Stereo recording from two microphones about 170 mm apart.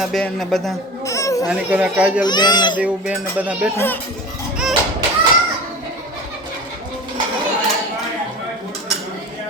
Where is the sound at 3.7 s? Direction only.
10° left (ahead or behind).